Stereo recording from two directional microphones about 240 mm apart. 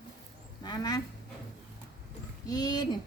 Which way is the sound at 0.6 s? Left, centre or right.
Centre.